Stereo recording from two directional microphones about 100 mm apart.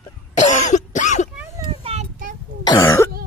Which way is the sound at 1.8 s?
70° right (ahead or behind).